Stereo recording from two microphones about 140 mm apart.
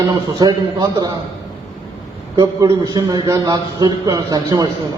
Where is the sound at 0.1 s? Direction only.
30° right (ahead or behind).